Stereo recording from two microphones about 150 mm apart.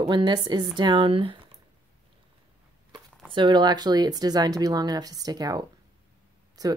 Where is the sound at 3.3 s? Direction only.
30° right (ahead or behind).